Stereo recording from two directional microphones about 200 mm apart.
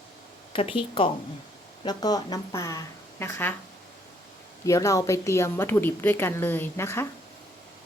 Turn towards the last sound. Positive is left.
turn(degrees=10)  # may be behind; listen again after turning